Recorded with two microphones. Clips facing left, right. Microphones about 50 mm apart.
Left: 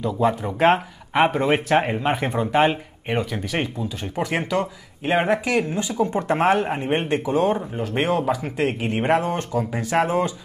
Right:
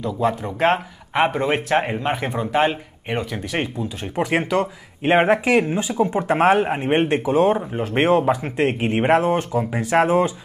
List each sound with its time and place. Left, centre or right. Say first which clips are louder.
0.0 s speech: left 1 dB; centre
4.2 s speech: right 3 dB; centre
5.0 s speech: right 4 dB; right